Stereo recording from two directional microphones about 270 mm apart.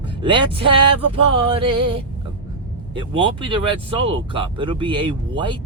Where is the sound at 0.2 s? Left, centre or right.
Centre.